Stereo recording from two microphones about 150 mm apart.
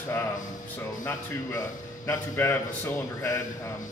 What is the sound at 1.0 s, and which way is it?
A man's voice, 20° left (ahead or behind).